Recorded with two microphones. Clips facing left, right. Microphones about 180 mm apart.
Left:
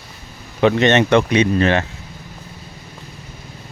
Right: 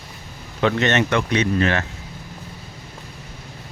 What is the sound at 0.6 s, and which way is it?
Speech, 20° left (ahead or behind).